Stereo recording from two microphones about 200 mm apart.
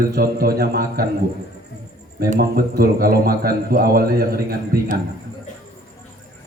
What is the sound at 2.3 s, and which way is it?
A man's voice, 50° right (ahead or behind).